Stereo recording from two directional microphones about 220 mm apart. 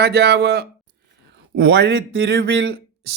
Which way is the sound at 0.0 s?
45° right (ahead or behind).